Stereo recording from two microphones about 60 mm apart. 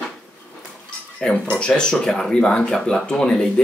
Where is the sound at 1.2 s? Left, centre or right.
Centre.